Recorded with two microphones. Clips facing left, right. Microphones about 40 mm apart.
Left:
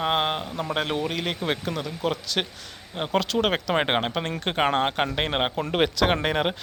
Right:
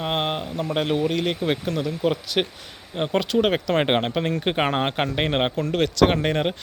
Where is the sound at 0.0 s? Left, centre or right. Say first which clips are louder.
Left 1 dB; centre.